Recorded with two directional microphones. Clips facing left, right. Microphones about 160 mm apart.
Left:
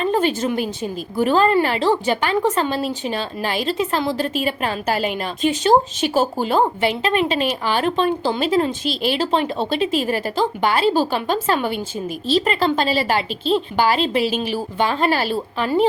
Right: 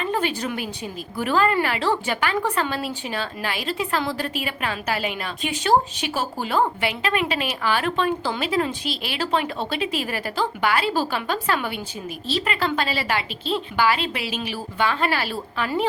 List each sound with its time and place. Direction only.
0.0 s a woman's voice: 35° left (ahead or behind)